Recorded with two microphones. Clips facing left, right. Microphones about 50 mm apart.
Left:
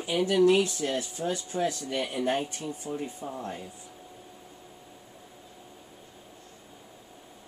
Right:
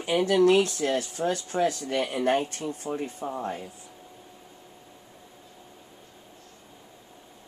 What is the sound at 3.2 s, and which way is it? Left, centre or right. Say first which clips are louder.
Speech: right 5 dB; right.